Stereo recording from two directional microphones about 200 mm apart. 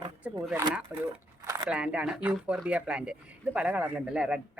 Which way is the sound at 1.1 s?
15° right (ahead or behind).